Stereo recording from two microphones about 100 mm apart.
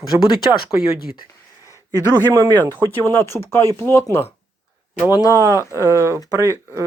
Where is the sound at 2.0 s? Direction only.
25° left (ahead or behind).